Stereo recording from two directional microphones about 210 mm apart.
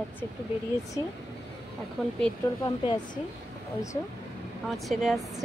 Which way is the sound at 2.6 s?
20° left (ahead or behind).